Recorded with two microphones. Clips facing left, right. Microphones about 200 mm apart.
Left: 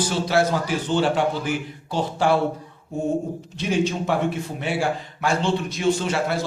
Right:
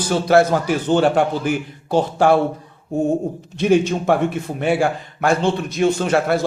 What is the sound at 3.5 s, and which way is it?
Speech, 55° right (ahead or behind).